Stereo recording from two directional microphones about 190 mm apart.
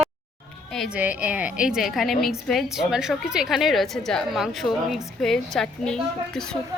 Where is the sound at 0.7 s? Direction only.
Centre (ahead or behind).